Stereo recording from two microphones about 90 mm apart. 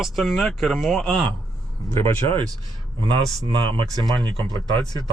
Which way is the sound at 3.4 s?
70° right (ahead or behind).